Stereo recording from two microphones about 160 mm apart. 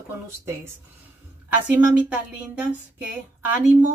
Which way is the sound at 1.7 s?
10° right (ahead or behind).